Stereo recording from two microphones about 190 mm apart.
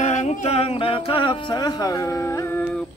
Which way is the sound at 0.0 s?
40° left (ahead or behind).